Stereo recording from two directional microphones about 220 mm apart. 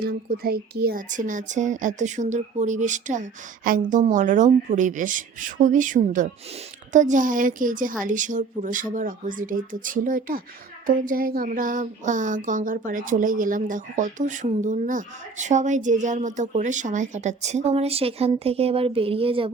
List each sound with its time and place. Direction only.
0.0 s speech: 45° right (ahead or behind); by 19.5 s 25° right (ahead or behind)